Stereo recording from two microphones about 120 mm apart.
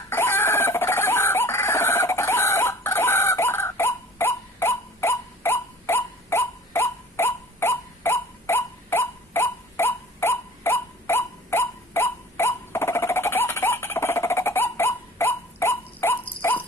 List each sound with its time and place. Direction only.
0.1 s chicken: 20° left (ahead or behind)